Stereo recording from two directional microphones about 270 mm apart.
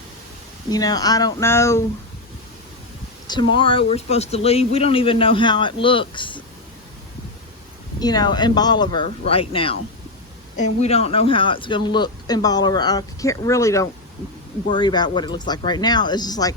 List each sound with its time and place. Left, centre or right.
0.7 s speech: centre
3.2 s speech: centre
7.9 s speech: centre
10.8 s speech: left